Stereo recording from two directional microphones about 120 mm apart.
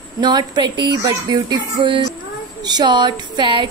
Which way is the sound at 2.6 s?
35° right (ahead or behind).